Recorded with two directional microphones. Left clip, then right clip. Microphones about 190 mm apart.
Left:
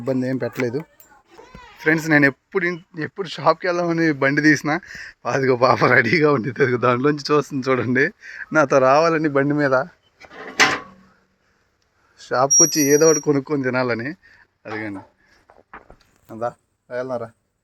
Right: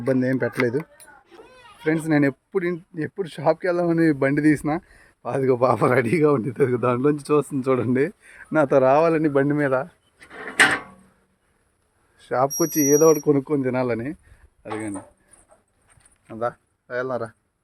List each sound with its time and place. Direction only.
0.0 s speech: 5° right (ahead or behind)
2.6 s speech: 20° right (ahead or behind); by 9.9 s 5° left (ahead or behind)
12.1 s speech: 5° right (ahead or behind)
16.3 s speech: 5° right (ahead or behind)